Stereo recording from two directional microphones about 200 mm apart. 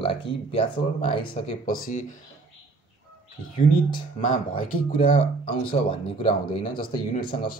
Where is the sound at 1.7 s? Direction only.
40° left (ahead or behind).